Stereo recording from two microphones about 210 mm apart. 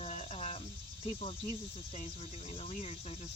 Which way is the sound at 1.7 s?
30° left (ahead or behind).